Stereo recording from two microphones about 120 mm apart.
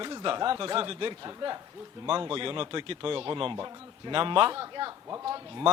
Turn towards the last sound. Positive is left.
turn(degrees=-40)  # may be behind; listen again after turning